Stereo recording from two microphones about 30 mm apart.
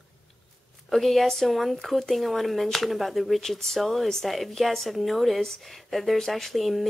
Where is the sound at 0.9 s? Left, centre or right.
Centre.